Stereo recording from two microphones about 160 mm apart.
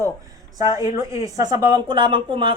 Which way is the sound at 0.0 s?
20° right (ahead or behind).